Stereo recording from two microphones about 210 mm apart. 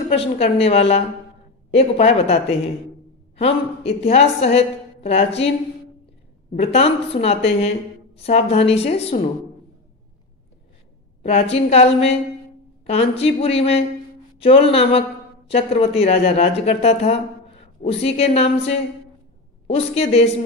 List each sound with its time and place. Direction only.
0.1 s a man's voice: 25° left (ahead or behind)
6.5 s a man's voice: 30° left (ahead or behind)
11.2 s a man's voice: 30° left (ahead or behind)